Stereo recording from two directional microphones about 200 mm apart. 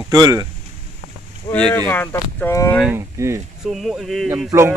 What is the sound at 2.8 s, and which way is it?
Speech, 10° right (ahead or behind).